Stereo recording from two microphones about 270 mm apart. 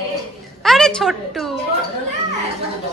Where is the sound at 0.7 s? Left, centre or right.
Centre.